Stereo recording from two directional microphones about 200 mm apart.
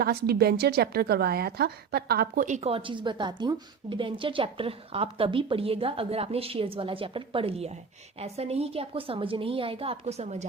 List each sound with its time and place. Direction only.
0.0 s a woman's voice: 50° right (ahead or behind); by 10.4 s 35° right (ahead or behind)